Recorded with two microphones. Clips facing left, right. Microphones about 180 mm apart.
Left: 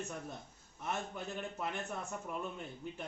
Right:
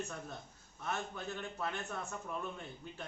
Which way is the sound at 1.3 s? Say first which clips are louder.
Left 1 dB; 15° left (ahead or behind).